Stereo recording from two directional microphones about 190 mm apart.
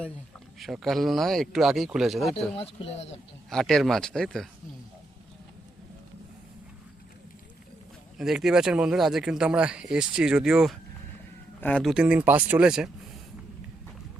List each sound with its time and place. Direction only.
0.6 s speech: centre (ahead or behind)
2.6 s speech: 30° left (ahead or behind)
3.5 s speech: centre (ahead or behind)
8.2 s speech: centre (ahead or behind)